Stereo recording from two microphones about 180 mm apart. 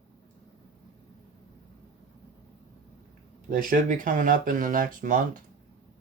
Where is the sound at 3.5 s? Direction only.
50° right (ahead or behind).